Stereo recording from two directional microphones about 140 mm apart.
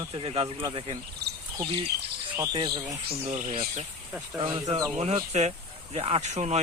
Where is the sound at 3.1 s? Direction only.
50° right (ahead or behind).